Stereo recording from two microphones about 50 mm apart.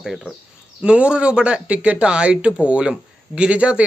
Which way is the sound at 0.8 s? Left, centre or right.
Right.